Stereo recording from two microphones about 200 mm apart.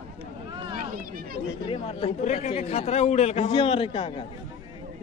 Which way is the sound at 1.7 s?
30° left (ahead or behind).